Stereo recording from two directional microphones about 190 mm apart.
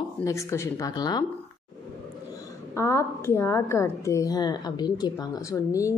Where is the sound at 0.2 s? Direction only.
15° left (ahead or behind).